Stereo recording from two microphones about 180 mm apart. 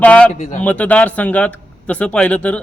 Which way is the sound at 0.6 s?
10° left (ahead or behind).